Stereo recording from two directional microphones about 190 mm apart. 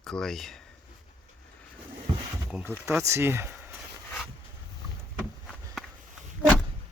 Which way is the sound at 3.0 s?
15° right (ahead or behind).